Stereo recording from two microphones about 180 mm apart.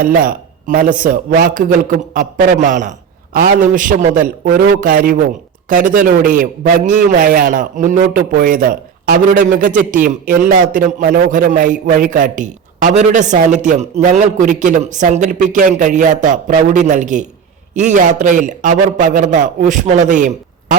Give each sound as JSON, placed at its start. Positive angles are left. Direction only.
{"t": 0.0, "sound": "a man's voice", "side_deg": -50}